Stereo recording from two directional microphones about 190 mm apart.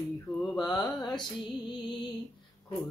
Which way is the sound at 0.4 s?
Centre (ahead or behind).